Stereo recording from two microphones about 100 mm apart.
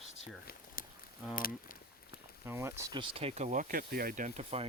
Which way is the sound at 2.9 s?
60° right (ahead or behind).